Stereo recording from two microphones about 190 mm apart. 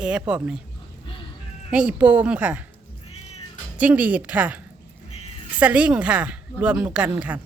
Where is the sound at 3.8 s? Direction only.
10° right (ahead or behind).